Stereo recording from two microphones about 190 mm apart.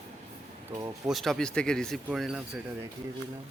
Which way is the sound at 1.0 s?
Centre (ahead or behind).